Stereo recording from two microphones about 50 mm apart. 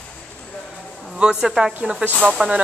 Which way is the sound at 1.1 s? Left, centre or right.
Centre.